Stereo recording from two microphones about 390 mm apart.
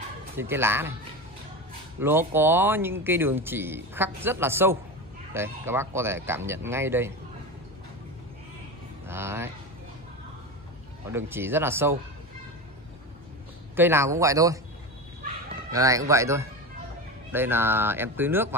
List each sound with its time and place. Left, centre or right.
0.4 s speech: centre
2.0 s speech: centre
9.0 s a sound: centre
11.1 s speech: centre
13.7 s speech: centre
15.7 s speech: centre